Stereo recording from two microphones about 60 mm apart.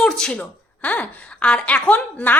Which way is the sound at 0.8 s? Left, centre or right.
Left.